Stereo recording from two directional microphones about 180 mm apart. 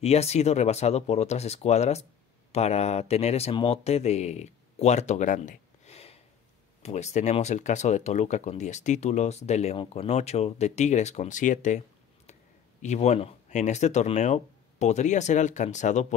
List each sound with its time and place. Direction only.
0.0 s speech: 35° left (ahead or behind)
12.8 s speech: 40° left (ahead or behind)